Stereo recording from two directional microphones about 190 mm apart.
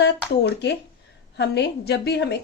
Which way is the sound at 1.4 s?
65° left (ahead or behind).